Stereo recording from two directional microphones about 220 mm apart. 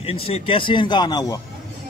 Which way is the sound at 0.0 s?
25° left (ahead or behind).